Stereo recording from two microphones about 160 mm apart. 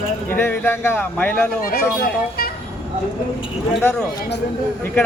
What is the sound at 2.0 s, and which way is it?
Speech, 75° left (ahead or behind).